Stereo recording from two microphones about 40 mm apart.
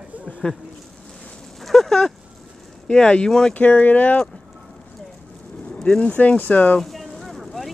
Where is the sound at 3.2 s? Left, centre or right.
Centre.